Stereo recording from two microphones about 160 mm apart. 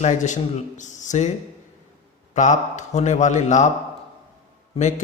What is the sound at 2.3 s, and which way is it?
A man's voice, 50° left (ahead or behind).